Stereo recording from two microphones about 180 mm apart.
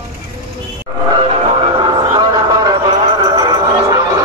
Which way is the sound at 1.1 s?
30° right (ahead or behind).